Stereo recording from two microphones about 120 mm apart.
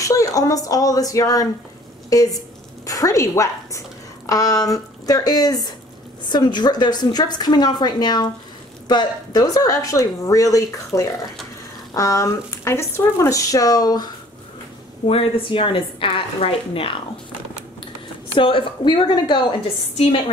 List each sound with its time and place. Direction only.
0.0 s a woman's voice: 30° left (ahead or behind)
15.0 s a woman's voice: 50° left (ahead or behind)
18.3 s a woman's voice: 45° left (ahead or behind)